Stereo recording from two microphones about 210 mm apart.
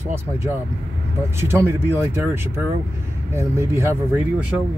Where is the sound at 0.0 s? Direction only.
10° right (ahead or behind).